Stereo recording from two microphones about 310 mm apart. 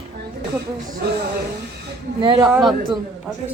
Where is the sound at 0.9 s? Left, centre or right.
Right.